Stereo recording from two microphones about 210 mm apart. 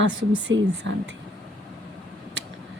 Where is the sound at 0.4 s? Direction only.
60° right (ahead or behind).